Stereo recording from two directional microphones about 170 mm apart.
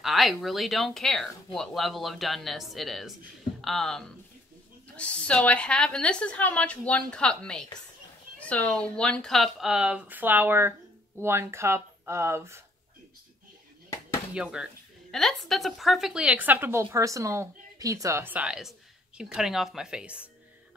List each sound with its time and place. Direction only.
0.0 s a woman's voice: centre (ahead or behind)
14.3 s speech: 5° right (ahead or behind)